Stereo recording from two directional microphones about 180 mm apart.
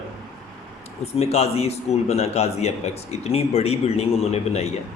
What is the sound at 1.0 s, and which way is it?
A man's voice, 35° left (ahead or behind).